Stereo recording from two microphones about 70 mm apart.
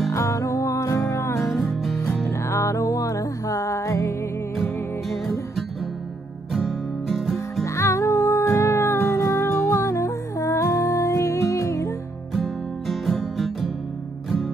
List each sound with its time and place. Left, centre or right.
0.1 s music: left
1.6 s music: centre
2.2 s music: left
7.1 s music: centre
7.6 s music: left
12.8 s music: centre